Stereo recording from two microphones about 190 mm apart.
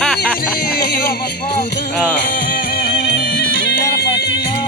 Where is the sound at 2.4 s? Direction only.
50° left (ahead or behind).